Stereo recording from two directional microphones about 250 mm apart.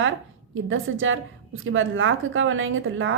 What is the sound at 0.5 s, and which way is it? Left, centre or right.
A woman's voice, right.